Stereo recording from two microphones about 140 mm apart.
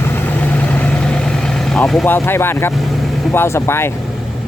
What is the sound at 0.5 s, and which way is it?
Vehicle, 10° left (ahead or behind).